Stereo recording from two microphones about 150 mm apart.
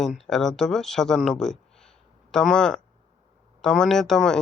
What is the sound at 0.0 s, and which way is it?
Speech, 5° left (ahead or behind).